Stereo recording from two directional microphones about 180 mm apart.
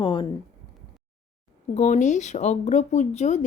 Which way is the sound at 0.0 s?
30° left (ahead or behind).